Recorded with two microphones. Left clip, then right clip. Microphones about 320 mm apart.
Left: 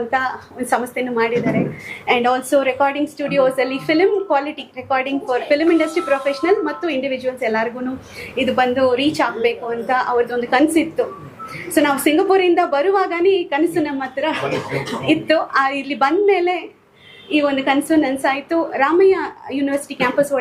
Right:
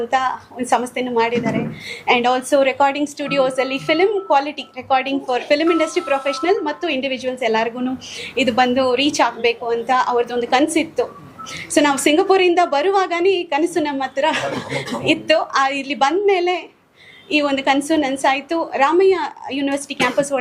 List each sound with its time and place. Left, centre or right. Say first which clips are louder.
0.1 s a woman's voice: right 1 dB; right